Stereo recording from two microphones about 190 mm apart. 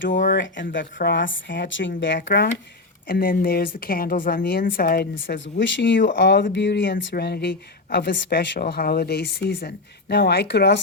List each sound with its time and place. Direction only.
0.1 s a woman's voice: 45° left (ahead or behind)
0.3 s speech: 75° left (ahead or behind)
0.9 s speech: 65° left (ahead or behind)
2.2 s a woman's voice: 60° left (ahead or behind)
5.2 s speech: 75° left (ahead or behind)
7.1 s speech: 60° left (ahead or behind)